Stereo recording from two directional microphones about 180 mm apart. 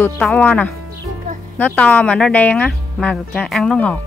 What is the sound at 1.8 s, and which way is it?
Speech, 10° left (ahead or behind).